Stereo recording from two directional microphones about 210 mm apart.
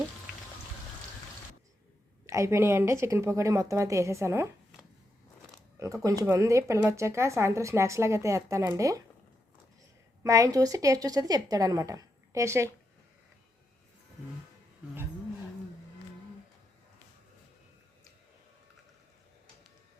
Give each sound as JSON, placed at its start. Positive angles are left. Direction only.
{"t": 2.2, "sound": "speech", "side_deg": -15}
{"t": 5.8, "sound": "speech", "side_deg": -15}
{"t": 10.2, "sound": "speech", "side_deg": -15}